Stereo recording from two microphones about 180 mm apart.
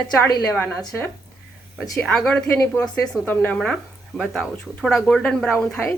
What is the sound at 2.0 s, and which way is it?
A woman's voice, centre (ahead or behind).